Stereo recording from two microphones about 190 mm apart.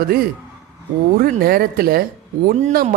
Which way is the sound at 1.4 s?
55° right (ahead or behind).